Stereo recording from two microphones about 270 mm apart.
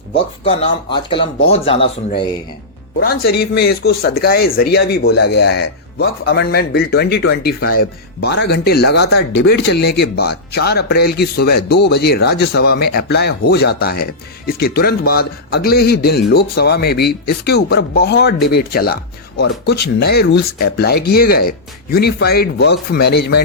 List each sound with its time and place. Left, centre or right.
0.4 s speech: centre
3.0 s speech: left